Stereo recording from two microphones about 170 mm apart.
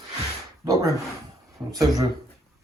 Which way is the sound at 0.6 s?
20° right (ahead or behind).